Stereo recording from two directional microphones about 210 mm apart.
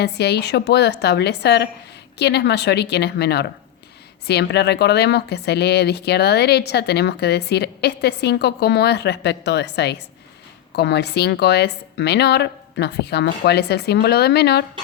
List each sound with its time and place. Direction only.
0.0 s speech: 50° left (ahead or behind)